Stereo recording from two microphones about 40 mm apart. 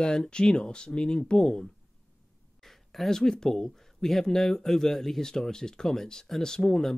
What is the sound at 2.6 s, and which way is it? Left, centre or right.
Speech, centre.